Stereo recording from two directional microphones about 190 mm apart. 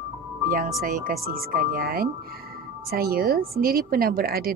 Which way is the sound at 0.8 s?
50° right (ahead or behind).